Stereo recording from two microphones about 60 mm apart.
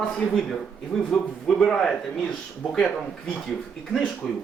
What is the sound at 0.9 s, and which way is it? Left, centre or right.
Speech, centre.